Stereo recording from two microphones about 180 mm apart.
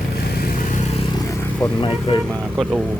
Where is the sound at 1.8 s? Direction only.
30° left (ahead or behind).